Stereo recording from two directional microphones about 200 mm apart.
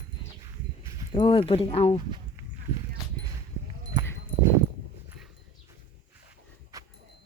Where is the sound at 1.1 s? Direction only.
25° left (ahead or behind).